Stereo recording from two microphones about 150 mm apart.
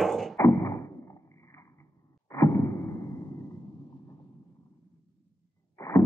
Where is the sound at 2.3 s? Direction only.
15° left (ahead or behind).